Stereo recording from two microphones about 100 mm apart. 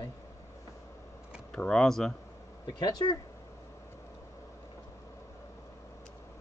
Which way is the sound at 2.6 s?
40° left (ahead or behind).